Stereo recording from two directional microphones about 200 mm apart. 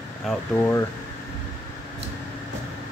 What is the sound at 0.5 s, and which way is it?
Speech, 15° left (ahead or behind).